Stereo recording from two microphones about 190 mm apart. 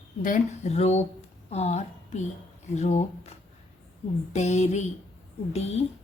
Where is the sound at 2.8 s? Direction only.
35° left (ahead or behind).